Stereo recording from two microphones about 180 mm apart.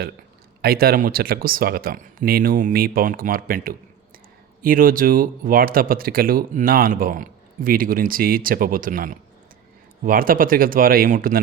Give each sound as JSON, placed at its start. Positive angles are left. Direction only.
{"t": 0.6, "sound": "speech", "side_deg": -55}